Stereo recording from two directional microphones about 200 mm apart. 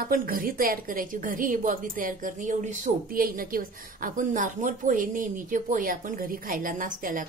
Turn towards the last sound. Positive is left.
turn(degrees=-40)  # may be behind; listen again after turning